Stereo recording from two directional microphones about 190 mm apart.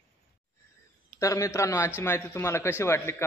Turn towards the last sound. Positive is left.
turn(degrees=15)  # may be behind; listen again after turning